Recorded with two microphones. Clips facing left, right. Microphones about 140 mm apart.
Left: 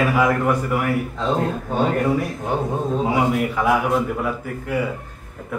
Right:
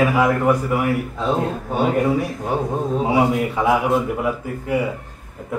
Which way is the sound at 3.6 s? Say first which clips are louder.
Right 2 dB; 20° right (ahead or behind).